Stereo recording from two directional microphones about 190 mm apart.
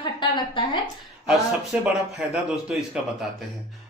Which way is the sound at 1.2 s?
Centre (ahead or behind).